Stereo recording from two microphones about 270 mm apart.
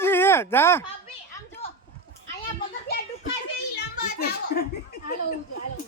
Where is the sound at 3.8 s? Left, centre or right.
Left.